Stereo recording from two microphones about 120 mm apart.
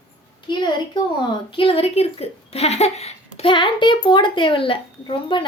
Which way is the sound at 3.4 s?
45° left (ahead or behind).